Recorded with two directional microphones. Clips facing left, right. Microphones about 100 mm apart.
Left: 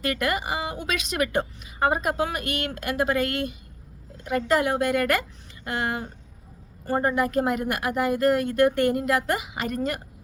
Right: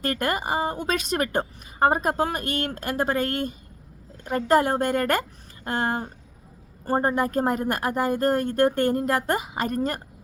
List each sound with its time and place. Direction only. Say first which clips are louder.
0.0 s a woman's voice: even; 40° right (ahead or behind)